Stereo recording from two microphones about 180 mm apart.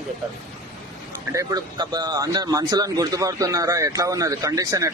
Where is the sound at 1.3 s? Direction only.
20° right (ahead or behind).